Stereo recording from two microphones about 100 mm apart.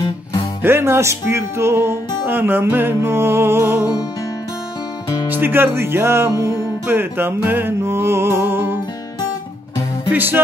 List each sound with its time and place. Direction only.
0.6 s speech: 25° right (ahead or behind)
5.3 s speech: 20° right (ahead or behind)
10.1 s speech: 20° right (ahead or behind)